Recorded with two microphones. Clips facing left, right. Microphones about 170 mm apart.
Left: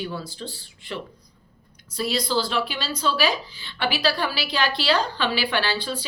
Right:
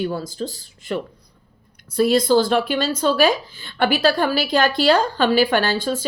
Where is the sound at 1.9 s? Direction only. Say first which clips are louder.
Right 9 dB; 50° right (ahead or behind).